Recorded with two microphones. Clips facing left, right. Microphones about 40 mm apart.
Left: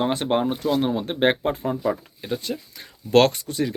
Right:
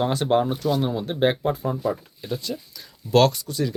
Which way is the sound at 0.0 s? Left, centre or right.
Left.